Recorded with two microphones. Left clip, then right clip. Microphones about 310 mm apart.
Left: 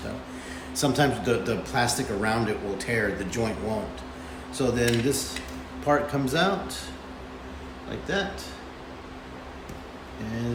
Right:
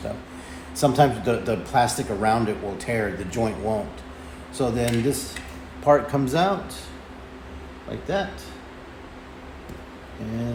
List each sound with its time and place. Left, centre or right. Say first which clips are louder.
0.8 s a man's voice: right 5 dB; centre
8.1 s a man's voice: right 3 dB; centre